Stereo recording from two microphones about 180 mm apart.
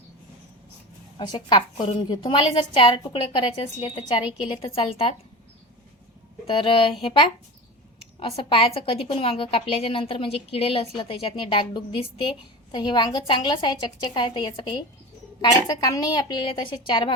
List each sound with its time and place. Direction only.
1.2 s a woman's voice: 25° left (ahead or behind)
6.5 s a woman's voice: 30° left (ahead or behind)